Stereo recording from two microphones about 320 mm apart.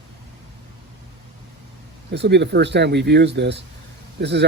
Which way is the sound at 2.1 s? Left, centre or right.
Right.